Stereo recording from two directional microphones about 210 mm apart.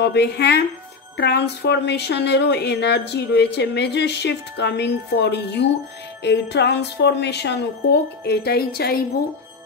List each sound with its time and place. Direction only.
0.0 s a woman's voice: 50° left (ahead or behind)